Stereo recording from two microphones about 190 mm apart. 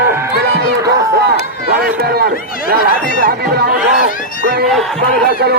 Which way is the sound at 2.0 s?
55° right (ahead or behind).